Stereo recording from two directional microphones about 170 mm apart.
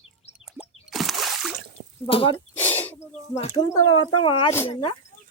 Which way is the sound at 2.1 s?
35° left (ahead or behind).